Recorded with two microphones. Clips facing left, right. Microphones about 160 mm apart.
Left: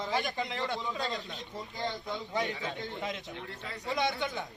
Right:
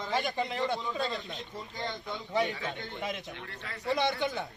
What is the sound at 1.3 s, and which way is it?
Speech, centre (ahead or behind).